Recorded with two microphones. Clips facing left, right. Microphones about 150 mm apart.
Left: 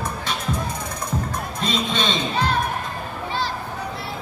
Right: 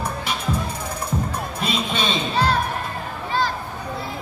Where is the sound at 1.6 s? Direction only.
10° right (ahead or behind).